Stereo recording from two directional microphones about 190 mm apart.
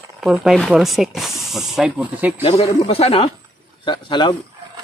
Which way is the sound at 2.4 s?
30° left (ahead or behind).